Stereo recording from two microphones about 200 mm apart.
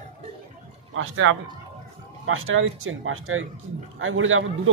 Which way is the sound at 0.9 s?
75° right (ahead or behind).